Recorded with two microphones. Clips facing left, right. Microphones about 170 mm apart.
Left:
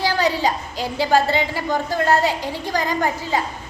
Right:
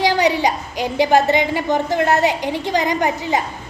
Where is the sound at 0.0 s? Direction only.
15° right (ahead or behind).